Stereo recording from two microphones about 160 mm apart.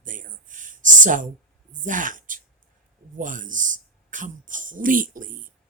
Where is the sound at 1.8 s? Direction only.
55° right (ahead or behind).